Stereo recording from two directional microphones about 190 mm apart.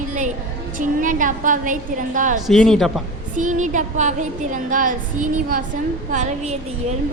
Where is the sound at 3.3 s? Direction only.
40° right (ahead or behind).